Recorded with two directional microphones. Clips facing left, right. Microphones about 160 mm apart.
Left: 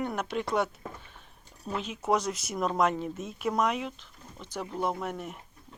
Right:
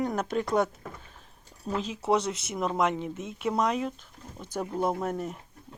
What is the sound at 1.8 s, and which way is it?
Speech, 30° right (ahead or behind).